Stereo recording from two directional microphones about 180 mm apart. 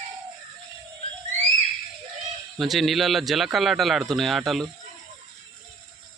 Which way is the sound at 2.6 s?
Centre (ahead or behind).